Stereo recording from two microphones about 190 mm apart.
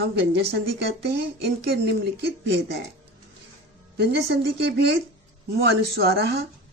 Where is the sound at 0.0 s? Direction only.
60° right (ahead or behind).